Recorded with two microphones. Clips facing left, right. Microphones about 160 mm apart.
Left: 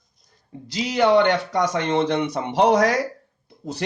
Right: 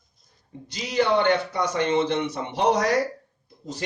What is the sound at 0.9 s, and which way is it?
Speech, 80° left.